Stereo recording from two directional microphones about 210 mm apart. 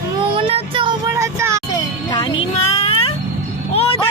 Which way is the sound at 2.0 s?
20° left (ahead or behind).